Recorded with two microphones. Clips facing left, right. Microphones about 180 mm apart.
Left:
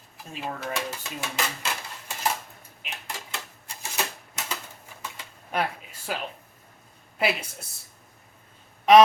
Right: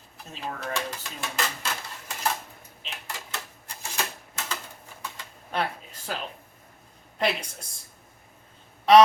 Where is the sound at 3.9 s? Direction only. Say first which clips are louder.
Left 1 dB; 15° left (ahead or behind).